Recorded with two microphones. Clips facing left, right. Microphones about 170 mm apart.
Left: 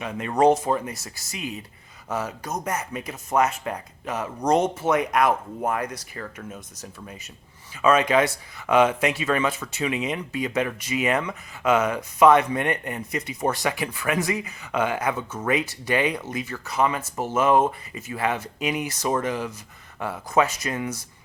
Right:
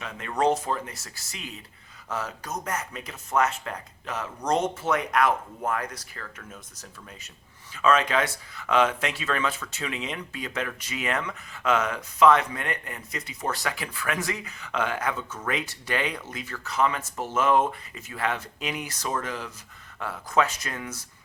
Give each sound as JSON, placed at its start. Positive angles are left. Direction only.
{"t": 0.0, "sound": "speech", "side_deg": 15}
{"t": 7.8, "sound": "speech", "side_deg": 15}